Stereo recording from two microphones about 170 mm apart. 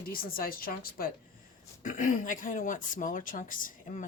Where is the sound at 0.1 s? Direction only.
60° left (ahead or behind).